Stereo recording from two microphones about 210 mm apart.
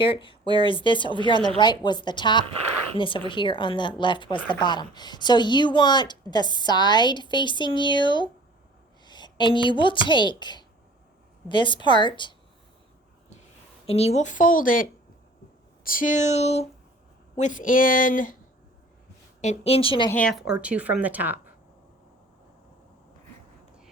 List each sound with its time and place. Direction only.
0.0 s a woman's voice: 25° left (ahead or behind)
13.8 s speech: 30° left (ahead or behind)
19.4 s speech: 30° left (ahead or behind)
20.1 s speech: 5° left (ahead or behind)